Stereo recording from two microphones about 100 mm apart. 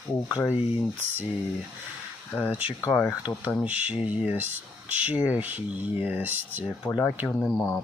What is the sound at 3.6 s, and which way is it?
Speech, 15° right (ahead or behind).